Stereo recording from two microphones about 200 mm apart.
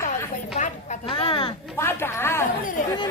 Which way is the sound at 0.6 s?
30° left (ahead or behind).